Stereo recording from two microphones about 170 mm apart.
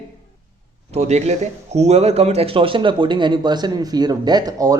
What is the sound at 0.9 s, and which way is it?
Speech, 40° right (ahead or behind).